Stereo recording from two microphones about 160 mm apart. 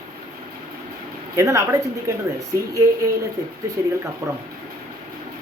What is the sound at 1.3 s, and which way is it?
Speech, 20° right (ahead or behind).